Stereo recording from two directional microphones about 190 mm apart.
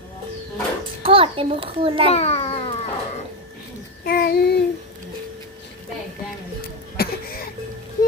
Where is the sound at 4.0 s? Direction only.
55° left (ahead or behind).